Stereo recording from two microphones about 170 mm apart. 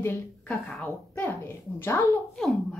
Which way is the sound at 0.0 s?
10° left (ahead or behind).